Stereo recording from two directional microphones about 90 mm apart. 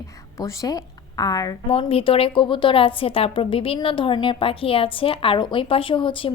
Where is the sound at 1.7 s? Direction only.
90° left.